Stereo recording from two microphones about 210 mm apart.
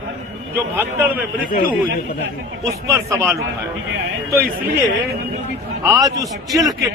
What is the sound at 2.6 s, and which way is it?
Speech, 15° right (ahead or behind).